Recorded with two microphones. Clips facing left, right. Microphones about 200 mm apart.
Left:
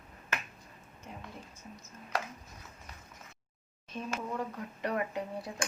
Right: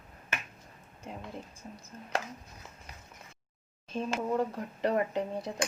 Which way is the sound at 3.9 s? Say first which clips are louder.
Right 6 dB; 30° right (ahead or behind).